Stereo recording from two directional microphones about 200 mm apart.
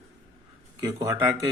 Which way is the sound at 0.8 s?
15° right (ahead or behind).